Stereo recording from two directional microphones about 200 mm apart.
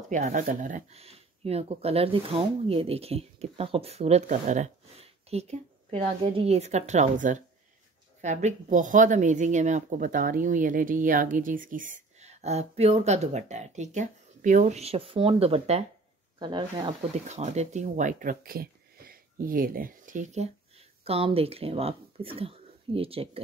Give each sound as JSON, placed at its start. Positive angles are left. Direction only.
{"t": 0.1, "sound": "speech", "side_deg": -40}